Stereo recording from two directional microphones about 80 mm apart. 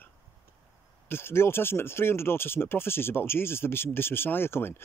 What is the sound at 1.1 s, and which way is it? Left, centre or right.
Speech, left.